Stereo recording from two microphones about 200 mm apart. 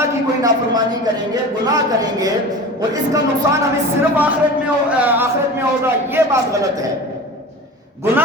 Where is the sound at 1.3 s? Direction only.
20° right (ahead or behind).